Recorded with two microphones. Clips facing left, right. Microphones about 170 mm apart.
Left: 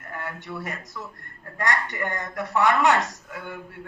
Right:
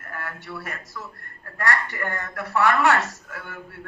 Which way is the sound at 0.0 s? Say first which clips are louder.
Left 1 dB; 20° left (ahead or behind).